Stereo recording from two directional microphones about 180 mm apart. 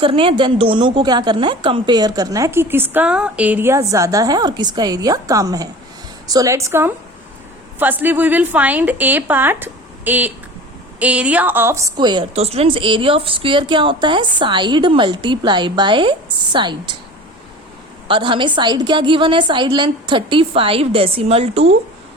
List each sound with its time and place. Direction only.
0.0 s a woman's voice: 30° right (ahead or behind)
18.1 s a woman's voice: 30° right (ahead or behind)